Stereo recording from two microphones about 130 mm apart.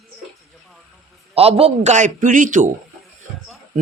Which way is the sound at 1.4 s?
50° right (ahead or behind).